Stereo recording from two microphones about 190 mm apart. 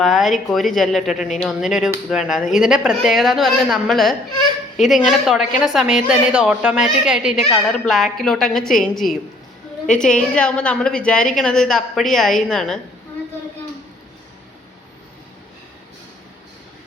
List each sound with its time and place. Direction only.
0.0 s a woman's voice: centre (ahead or behind)